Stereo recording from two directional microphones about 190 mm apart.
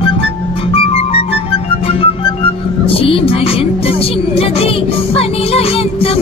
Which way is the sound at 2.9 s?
30° left (ahead or behind).